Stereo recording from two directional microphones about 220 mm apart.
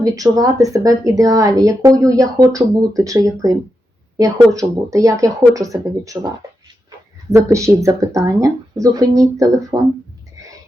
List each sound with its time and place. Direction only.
0.0 s speech: 15° right (ahead or behind)
7.3 s speech: 15° right (ahead or behind)